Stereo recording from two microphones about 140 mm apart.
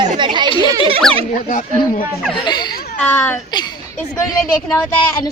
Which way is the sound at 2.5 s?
30° left (ahead or behind).